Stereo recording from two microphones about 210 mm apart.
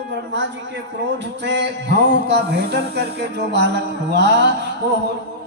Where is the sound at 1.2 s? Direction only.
55° right (ahead or behind).